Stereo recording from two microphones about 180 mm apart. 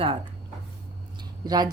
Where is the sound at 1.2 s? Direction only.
20° right (ahead or behind).